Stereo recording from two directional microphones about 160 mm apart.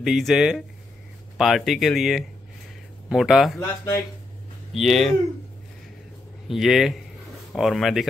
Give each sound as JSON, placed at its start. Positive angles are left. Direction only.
{"t": 0.0, "sound": "speech", "side_deg": 0}
{"t": 3.5, "sound": "speech", "side_deg": 20}
{"t": 4.7, "sound": "speech", "side_deg": 0}
{"t": 6.5, "sound": "speech", "side_deg": 0}